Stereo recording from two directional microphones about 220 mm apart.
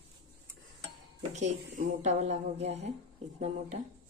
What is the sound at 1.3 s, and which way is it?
Speech, 30° right (ahead or behind).